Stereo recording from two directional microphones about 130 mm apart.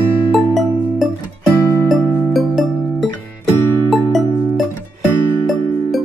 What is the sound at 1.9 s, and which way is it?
Music, centre (ahead or behind).